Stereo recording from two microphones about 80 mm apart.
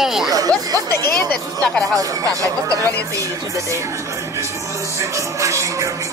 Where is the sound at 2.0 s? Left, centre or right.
Right.